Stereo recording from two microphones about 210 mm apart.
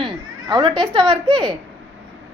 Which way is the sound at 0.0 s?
25° right (ahead or behind).